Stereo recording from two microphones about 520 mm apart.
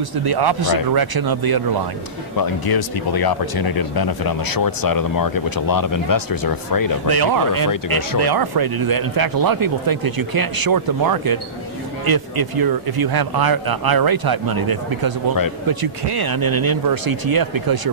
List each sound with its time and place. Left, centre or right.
0.1 s speech: right
2.3 s speech: left
7.1 s speech: right